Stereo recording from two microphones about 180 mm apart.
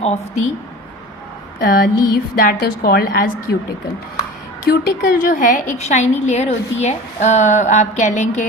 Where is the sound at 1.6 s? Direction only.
55° left (ahead or behind).